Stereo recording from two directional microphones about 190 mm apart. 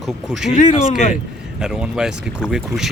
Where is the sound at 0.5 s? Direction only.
40° left (ahead or behind).